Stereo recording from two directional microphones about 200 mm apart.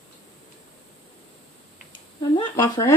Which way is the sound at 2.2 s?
20° left (ahead or behind).